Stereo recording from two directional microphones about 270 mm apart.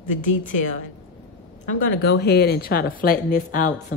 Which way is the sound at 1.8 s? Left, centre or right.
Left.